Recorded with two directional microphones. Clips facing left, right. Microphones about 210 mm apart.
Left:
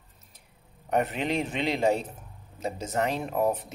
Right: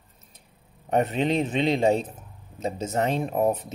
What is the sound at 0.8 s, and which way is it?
Speech, 25° right (ahead or behind).